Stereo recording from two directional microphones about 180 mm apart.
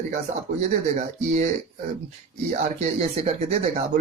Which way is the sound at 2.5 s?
40° right (ahead or behind).